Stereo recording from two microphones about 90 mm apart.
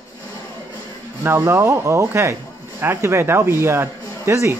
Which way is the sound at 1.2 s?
30° right (ahead or behind).